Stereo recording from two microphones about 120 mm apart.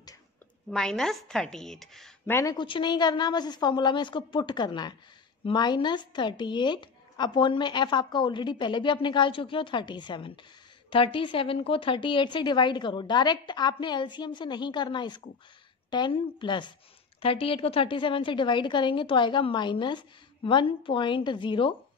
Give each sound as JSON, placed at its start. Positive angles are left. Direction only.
{"t": 0.7, "sound": "a woman's voice", "side_deg": 5}
{"t": 2.2, "sound": "a woman's voice", "side_deg": 20}
{"t": 2.5, "sound": "a woman's voice", "side_deg": 40}